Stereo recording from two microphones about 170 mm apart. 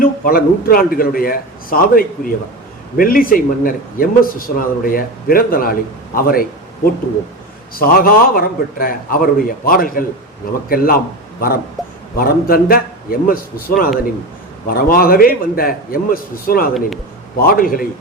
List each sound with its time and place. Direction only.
0.0 s a man's voice: 60° left (ahead or behind)
7.8 s a man's voice: 60° left (ahead or behind)
11.8 s a sound: centre (ahead or behind)
12.1 s a man's voice: 60° left (ahead or behind)